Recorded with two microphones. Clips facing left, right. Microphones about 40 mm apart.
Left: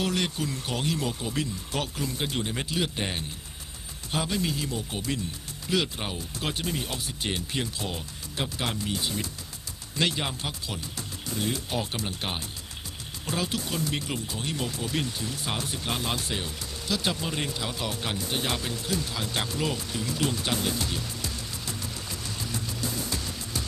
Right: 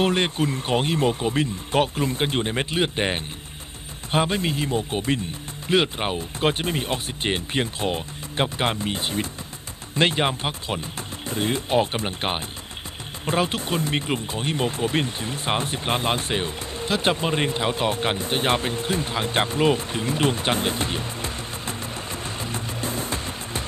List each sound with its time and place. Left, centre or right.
0.0 s speech: right